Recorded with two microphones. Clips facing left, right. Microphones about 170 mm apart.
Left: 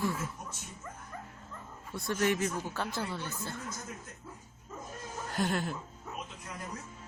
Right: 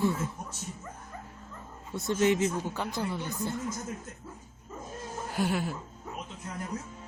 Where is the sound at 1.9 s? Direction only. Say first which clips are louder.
Right 4 dB; 20° right (ahead or behind).